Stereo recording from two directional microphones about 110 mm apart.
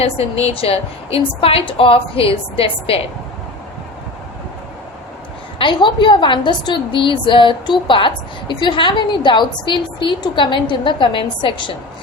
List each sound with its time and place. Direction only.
0.0 s a woman's voice: 65° left (ahead or behind)
5.5 s a woman's voice: 45° left (ahead or behind)